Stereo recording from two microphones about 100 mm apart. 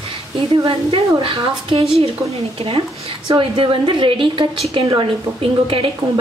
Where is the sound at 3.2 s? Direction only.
60° right (ahead or behind).